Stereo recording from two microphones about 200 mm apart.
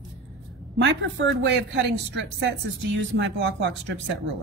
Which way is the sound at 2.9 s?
65° right (ahead or behind).